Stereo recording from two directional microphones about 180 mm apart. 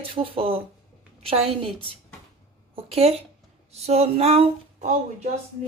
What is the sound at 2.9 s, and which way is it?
Speech, 35° right (ahead or behind).